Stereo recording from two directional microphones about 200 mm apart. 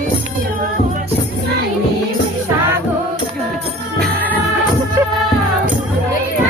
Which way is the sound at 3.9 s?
5° left (ahead or behind).